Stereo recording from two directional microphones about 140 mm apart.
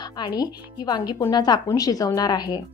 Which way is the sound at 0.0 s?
30° left (ahead or behind).